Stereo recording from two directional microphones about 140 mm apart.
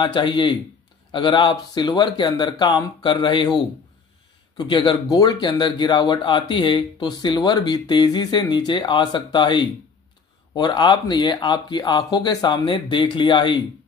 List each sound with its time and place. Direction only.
0.0 s speech: 35° left (ahead or behind)